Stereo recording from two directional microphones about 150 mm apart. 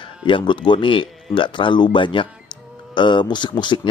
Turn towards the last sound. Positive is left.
turn(degrees=30)  # may be behind; listen again after turning